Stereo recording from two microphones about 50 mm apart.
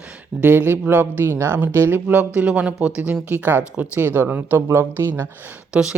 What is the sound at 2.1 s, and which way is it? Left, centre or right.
Speech, right.